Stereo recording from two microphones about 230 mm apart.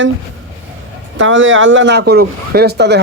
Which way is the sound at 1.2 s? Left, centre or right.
Right.